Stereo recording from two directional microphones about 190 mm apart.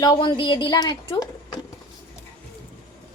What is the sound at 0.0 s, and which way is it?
A woman's voice, 20° left (ahead or behind).